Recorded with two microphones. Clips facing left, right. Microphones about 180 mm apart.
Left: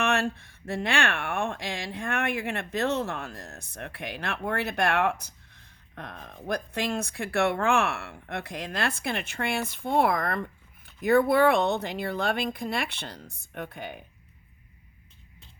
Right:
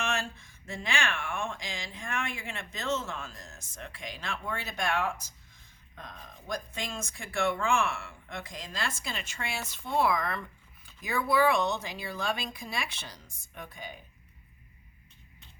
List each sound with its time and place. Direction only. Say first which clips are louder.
0.0 s speech: left 7 dB; 60° left (ahead or behind)